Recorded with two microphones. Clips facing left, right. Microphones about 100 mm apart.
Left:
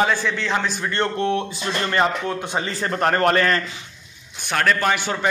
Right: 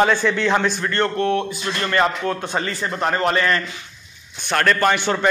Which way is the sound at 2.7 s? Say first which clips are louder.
Left 1 dB; 35° left (ahead or behind).